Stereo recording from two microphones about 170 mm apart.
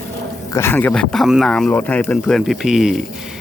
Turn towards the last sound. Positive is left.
turn(degrees=-5)  # may be behind; listen again after turning